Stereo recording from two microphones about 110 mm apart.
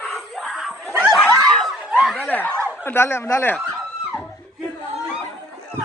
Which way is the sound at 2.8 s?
20° left (ahead or behind).